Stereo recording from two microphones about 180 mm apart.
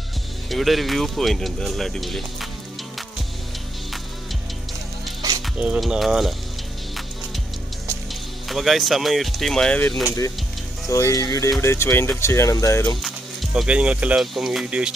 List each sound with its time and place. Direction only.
0.5 s speech: centre (ahead or behind)
5.4 s speech: 5° right (ahead or behind)
8.1 s speech: centre (ahead or behind); by 12.9 s 15° left (ahead or behind)
13.0 s speech: centre (ahead or behind)